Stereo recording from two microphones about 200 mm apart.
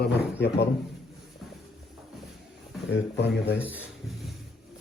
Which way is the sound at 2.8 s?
60° left (ahead or behind).